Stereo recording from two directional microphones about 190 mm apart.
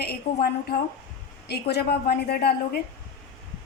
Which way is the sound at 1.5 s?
60° left (ahead or behind).